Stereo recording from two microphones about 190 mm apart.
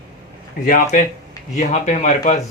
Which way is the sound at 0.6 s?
45° left (ahead or behind).